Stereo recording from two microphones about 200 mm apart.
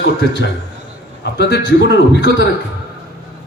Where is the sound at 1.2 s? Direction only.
60° left (ahead or behind).